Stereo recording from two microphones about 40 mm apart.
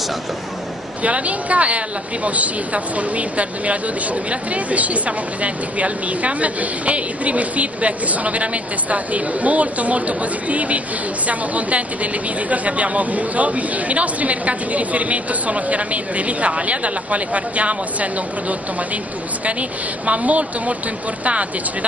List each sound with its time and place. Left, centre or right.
1.0 s a woman's voice: right
20.1 s a woman's voice: right